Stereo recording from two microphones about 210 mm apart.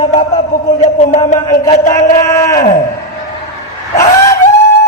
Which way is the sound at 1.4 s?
20° left (ahead or behind).